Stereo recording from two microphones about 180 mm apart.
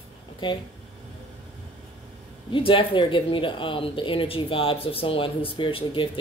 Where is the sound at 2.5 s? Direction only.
30° left (ahead or behind).